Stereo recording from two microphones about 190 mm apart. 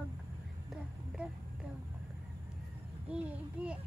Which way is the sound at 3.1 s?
5° right (ahead or behind).